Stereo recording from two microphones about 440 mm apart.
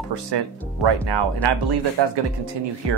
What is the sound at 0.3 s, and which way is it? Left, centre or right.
Speech, right.